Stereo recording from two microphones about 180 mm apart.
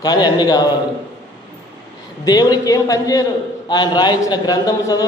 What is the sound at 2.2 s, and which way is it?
A man's voice, 20° left (ahead or behind).